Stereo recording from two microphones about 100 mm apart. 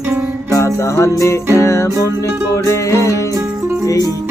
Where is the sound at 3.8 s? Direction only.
35° left (ahead or behind).